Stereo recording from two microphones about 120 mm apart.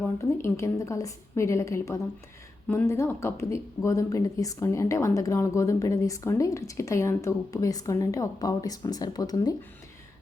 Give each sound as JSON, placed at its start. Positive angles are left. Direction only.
{"t": 0.2, "sound": "speech", "side_deg": 25}